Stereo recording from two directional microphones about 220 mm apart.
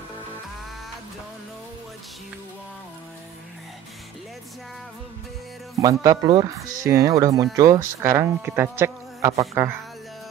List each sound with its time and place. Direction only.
5.8 s speech: 15° right (ahead or behind)